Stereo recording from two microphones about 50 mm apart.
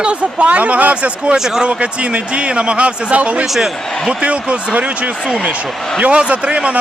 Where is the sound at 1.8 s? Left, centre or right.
Right.